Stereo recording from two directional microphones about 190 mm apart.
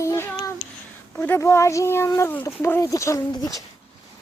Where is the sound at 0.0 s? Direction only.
15° left (ahead or behind).